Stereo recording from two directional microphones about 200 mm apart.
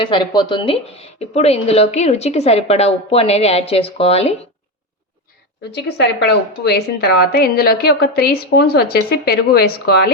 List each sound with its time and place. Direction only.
0.0 s a woman's voice: 20° left (ahead or behind)
5.7 s a woman's voice: 60° left (ahead or behind)